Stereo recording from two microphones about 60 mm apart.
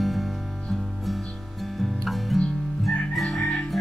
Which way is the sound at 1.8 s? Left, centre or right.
Centre.